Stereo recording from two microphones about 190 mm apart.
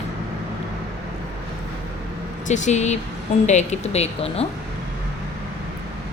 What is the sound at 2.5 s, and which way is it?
Speech, 40° left (ahead or behind).